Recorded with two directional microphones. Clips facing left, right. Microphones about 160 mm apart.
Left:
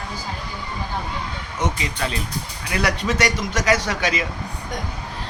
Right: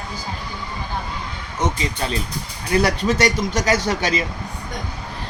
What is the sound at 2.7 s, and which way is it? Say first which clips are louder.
A man's voice: right 4 dB; 30° right (ahead or behind).